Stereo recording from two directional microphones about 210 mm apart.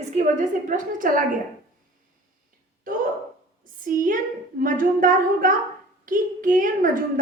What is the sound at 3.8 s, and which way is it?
A woman's voice, 40° right (ahead or behind).